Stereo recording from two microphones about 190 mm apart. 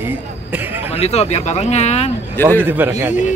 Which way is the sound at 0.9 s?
35° left (ahead or behind).